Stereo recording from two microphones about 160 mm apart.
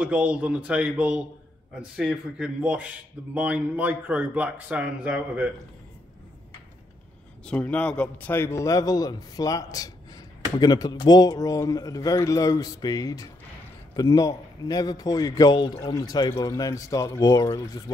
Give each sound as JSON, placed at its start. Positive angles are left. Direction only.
{"t": 0.0, "sound": "speech", "side_deg": -10}
{"t": 7.4, "sound": "a man's voice", "side_deg": 10}